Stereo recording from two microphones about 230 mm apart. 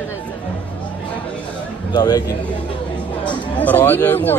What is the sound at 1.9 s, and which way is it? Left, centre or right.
Speech, centre.